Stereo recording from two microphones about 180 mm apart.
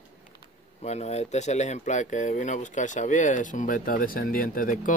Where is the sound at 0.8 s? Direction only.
40° left (ahead or behind).